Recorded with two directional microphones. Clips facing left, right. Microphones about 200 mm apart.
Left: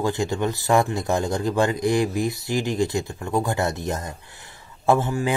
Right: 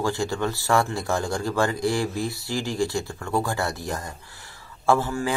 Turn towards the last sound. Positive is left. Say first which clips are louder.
# left 2 dB
turn(degrees=20)  # may be behind; listen again after turning